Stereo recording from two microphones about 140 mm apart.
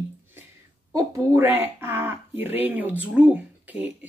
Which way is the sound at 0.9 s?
20° right (ahead or behind).